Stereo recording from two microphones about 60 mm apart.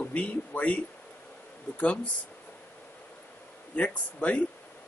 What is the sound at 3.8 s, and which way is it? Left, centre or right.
Speech, left.